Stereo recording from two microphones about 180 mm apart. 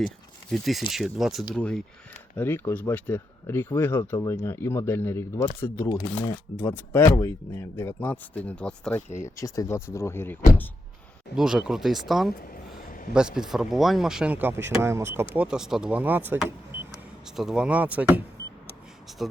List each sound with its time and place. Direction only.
0.5 s speech: centre (ahead or behind)
5.9 s speech: 25° left (ahead or behind)
6.6 s speech: 10° left (ahead or behind)
9.1 s speech: 15° left (ahead or behind)
11.3 s speech: 5° right (ahead or behind)